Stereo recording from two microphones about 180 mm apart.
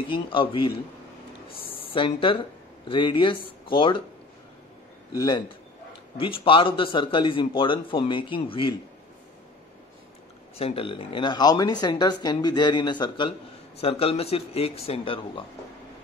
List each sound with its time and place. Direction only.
0.1 s speech: 25° left (ahead or behind)
1.8 s speech: 30° left (ahead or behind)
5.1 s speech: 20° left (ahead or behind)
10.6 s speech: 30° left (ahead or behind)